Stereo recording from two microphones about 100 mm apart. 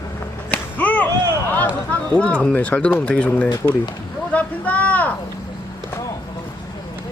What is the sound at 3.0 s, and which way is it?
Speech, 10° left (ahead or behind).